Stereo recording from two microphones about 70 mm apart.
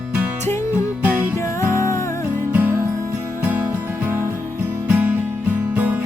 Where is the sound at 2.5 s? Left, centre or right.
Right.